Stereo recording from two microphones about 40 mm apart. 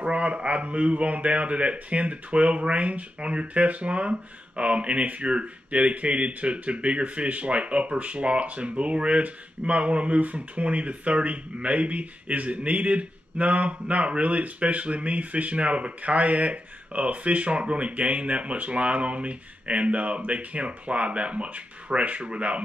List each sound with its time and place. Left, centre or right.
0.0 s speech: right